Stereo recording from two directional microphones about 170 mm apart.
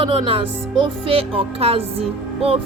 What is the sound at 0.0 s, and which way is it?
Music, 30° right (ahead or behind).